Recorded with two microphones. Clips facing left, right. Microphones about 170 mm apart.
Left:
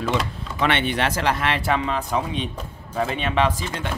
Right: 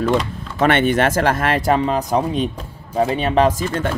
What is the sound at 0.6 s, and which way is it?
Speech, 45° right (ahead or behind).